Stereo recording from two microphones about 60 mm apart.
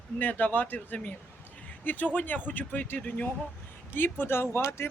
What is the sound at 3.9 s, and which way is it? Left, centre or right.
Speech, left.